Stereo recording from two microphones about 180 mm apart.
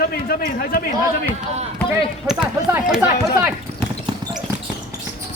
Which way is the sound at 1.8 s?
Centre (ahead or behind).